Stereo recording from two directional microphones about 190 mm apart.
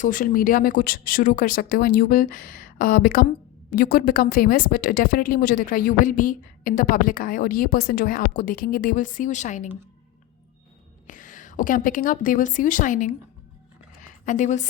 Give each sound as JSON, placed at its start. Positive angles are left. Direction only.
{"t": 0.0, "sound": "speech", "side_deg": 45}
{"t": 11.0, "sound": "a woman's voice", "side_deg": 45}
{"t": 14.3, "sound": "a woman's voice", "side_deg": 40}